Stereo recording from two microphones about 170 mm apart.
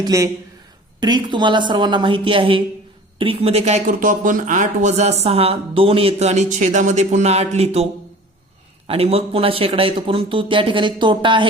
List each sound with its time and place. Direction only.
0.0 s a woman's voice: 20° right (ahead or behind); by 7.9 s 35° right (ahead or behind)
8.9 s speech: 35° right (ahead or behind)